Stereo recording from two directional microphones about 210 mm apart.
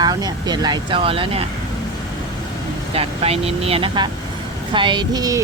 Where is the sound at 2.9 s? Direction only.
25° right (ahead or behind).